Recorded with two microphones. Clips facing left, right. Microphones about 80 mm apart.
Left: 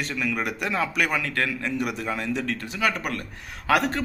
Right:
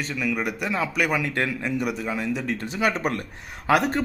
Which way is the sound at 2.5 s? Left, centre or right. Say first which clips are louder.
Right 2 dB; right.